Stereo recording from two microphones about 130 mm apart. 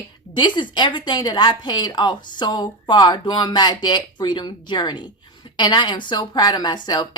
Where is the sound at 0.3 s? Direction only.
35° left (ahead or behind).